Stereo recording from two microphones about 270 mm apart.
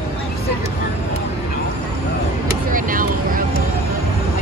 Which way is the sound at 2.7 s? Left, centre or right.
Right.